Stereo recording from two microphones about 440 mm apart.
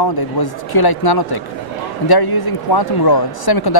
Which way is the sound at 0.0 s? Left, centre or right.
Left.